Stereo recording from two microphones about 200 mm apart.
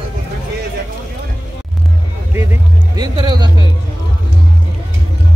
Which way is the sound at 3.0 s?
20° right (ahead or behind).